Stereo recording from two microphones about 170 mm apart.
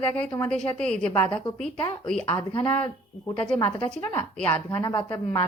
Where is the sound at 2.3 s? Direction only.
25° left (ahead or behind).